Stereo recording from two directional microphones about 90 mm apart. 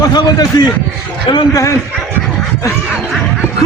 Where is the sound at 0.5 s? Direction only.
50° left (ahead or behind).